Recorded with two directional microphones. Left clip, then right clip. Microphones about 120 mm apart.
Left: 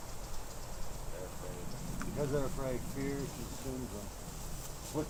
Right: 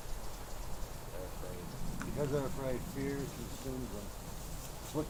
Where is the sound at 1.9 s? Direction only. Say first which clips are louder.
Even; 5° right (ahead or behind).